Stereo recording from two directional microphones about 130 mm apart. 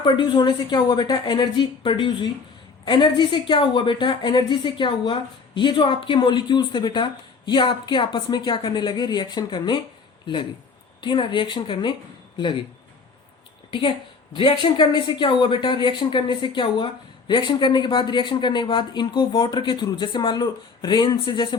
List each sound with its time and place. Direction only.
0.0 s speech: 35° left (ahead or behind)
11.0 s speech: 35° left (ahead or behind)
13.7 s a woman's voice: 40° left (ahead or behind)